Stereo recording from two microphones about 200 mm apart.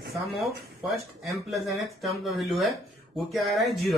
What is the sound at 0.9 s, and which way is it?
Speech, centre (ahead or behind).